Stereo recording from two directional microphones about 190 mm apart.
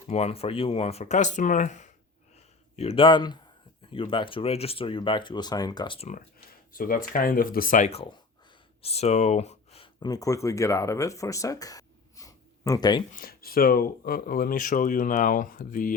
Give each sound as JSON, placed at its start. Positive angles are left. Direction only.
{"t": 0.1, "sound": "speech", "side_deg": 35}
{"t": 6.7, "sound": "speech", "side_deg": 45}
{"t": 13.1, "sound": "speech", "side_deg": 50}